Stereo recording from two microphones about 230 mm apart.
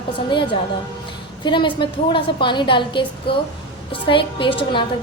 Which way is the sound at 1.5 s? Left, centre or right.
Left.